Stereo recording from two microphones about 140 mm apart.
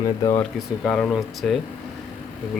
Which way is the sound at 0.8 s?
5° left (ahead or behind).